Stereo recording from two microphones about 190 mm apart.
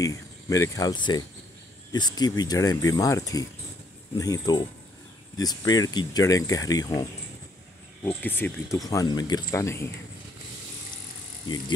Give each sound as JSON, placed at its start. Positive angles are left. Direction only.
{"t": 0.0, "sound": "speech", "side_deg": 15}